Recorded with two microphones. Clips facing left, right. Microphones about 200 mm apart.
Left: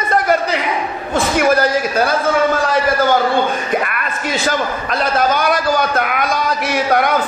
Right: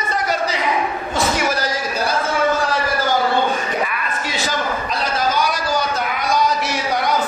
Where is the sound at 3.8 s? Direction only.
60° left (ahead or behind).